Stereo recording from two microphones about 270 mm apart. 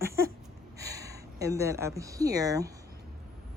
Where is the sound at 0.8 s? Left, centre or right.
Centre.